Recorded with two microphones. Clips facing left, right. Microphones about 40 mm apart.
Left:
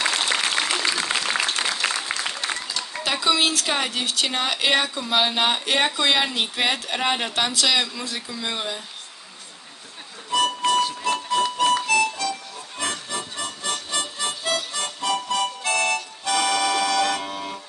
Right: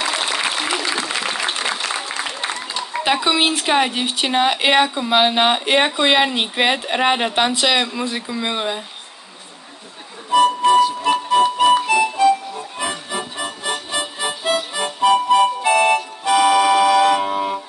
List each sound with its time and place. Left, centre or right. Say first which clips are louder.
0.0 s applause: right 2 dB; right
1.2 s a sound: right 2 dB; right
1.9 s applause: right 2 dB; right
2.7 s speech: right 7 dB; right
10.3 s music: right 7 dB; right